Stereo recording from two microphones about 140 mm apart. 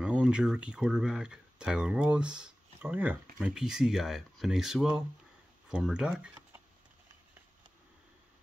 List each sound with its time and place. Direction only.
0.0 s speech: 5° right (ahead or behind)